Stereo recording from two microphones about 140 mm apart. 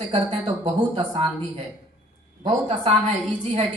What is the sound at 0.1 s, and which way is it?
A woman's voice, 40° right (ahead or behind).